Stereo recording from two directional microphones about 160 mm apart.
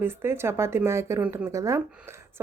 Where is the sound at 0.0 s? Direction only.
15° right (ahead or behind).